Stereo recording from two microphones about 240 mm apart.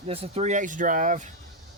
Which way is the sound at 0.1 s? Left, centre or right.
Right.